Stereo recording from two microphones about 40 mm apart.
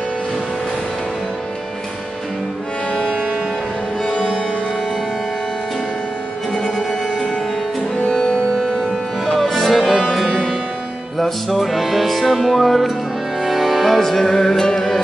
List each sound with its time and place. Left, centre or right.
2.9 s music: left
6.9 s music: centre
9.2 s music: centre